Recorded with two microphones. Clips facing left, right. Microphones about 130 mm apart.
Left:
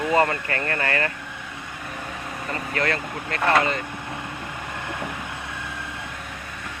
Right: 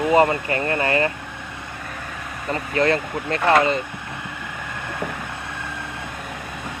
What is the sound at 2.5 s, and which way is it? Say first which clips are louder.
Speech: right 6 dB; 25° right (ahead or behind).